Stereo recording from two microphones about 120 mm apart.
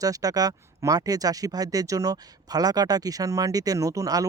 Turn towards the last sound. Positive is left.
turn(degrees=-30)  # may be behind; listen again after turning